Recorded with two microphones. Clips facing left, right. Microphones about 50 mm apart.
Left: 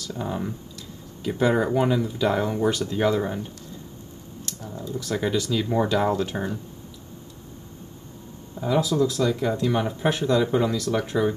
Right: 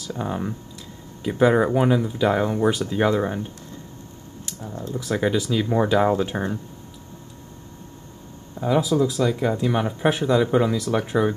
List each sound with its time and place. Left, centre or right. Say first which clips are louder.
0.0 s speech: right 2 dB; centre
4.5 s computer keyboard: right 1 dB; centre
4.9 s speech: right 3 dB; centre
8.5 s speech: right 2 dB; centre